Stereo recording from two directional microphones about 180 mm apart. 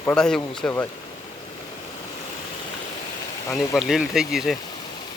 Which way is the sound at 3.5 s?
Centre (ahead or behind).